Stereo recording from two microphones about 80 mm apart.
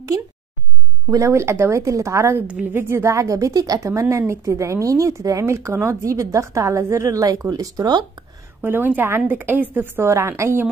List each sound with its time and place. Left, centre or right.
1.1 s speech: right
2.6 s speech: right
8.6 s a woman's voice: right